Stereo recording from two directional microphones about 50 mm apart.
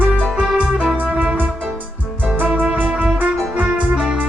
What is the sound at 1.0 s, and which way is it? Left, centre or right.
Music, right.